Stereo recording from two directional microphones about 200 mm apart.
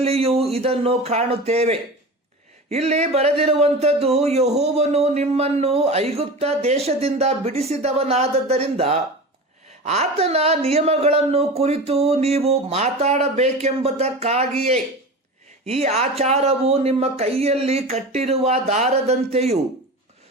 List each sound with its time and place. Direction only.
0.0 s speech: 30° right (ahead or behind)